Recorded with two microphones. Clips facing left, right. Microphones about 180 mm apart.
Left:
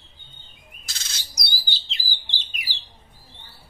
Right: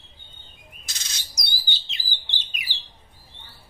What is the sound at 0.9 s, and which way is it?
Bird, 20° right (ahead or behind).